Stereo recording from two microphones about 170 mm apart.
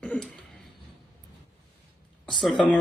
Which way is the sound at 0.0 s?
5° left (ahead or behind).